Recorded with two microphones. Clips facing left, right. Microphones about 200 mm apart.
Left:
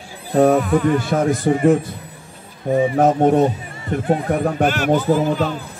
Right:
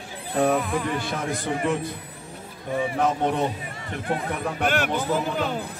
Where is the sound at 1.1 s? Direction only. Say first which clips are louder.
Left 10 dB; 45° left (ahead or behind).